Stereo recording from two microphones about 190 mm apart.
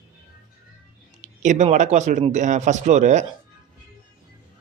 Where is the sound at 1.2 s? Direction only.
40° right (ahead or behind).